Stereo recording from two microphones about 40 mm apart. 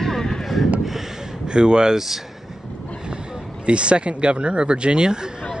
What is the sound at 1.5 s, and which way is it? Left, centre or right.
Speech, right.